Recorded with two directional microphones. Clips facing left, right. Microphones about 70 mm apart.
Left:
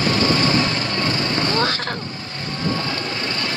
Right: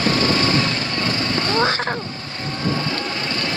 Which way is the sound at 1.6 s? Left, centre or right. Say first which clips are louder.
Right 3 dB; right.